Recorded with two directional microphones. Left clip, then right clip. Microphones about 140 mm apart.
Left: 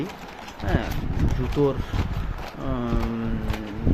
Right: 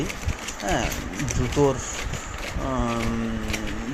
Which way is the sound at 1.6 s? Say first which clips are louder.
Right 2 dB; 15° left (ahead or behind).